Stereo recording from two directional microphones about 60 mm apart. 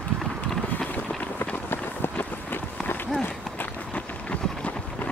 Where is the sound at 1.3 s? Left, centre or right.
Left.